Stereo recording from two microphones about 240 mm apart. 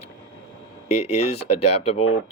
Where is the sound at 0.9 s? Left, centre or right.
Left.